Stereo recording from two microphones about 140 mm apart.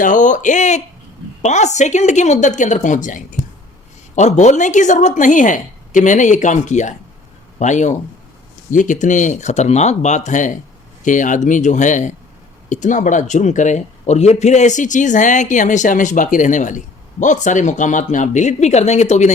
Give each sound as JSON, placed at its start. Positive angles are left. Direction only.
{"t": 0.0, "sound": "speech", "side_deg": 65}